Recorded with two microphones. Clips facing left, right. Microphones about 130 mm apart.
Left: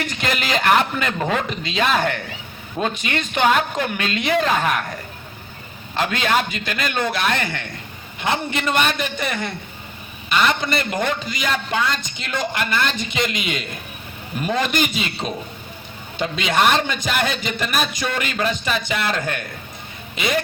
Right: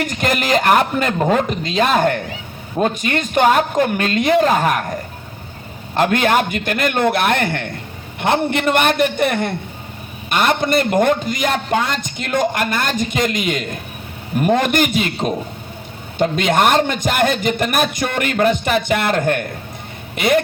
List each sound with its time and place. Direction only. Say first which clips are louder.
0.0 s a man's voice: right 5 dB; 45° right (ahead or behind)
6.0 s a man's voice: right 5 dB; 55° right (ahead or behind)